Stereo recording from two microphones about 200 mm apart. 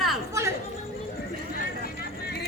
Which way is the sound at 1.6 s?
50° left (ahead or behind).